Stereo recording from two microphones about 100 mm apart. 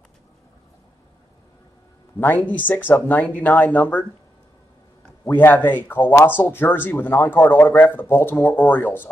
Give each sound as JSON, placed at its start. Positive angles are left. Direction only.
{"t": 2.1, "sound": "speech", "side_deg": 20}
{"t": 5.2, "sound": "speech", "side_deg": 15}